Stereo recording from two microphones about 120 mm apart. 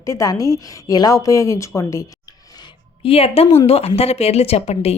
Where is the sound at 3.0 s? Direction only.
55° left (ahead or behind).